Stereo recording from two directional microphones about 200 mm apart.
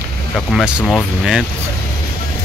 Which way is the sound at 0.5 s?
5° right (ahead or behind).